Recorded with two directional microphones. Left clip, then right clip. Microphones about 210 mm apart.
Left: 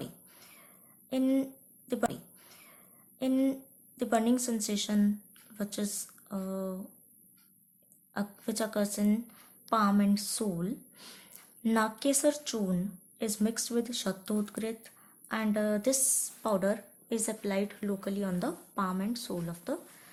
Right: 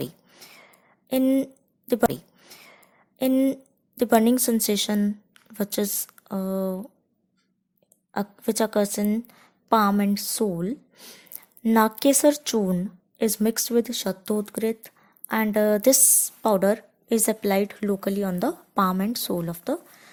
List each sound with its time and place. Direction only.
0.0 s whispering: 40° right (ahead or behind)
1.1 s a woman's voice: 35° right (ahead or behind)
1.9 s a sound: 40° right (ahead or behind)
3.2 s a woman's voice: 40° right (ahead or behind)
8.1 s a woman's voice: 40° right (ahead or behind)